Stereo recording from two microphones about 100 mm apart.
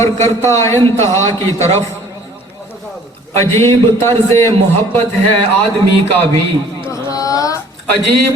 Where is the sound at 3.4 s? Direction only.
25° left (ahead or behind).